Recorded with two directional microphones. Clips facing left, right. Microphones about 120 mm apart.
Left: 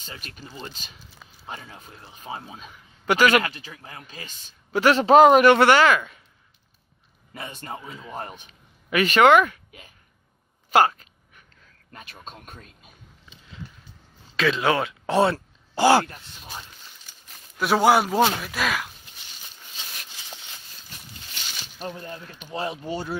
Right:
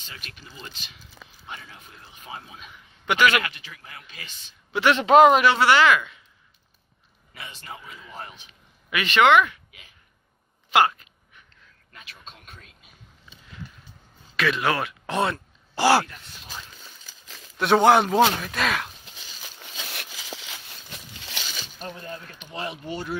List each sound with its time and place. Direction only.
0.1 s a man's voice: 40° left (ahead or behind)
5.4 s speech: 55° left (ahead or behind)
7.3 s a man's voice: 45° left (ahead or behind)
8.1 s speech: 50° left (ahead or behind)
10.7 s a sound: 40° left (ahead or behind)
11.9 s speech: 45° left (ahead or behind)
14.3 s speech: 25° left (ahead or behind)
17.6 s a man's voice: 5° left (ahead or behind)
19.4 s a sound: 80° right
22.5 s a man's voice: 30° left (ahead or behind)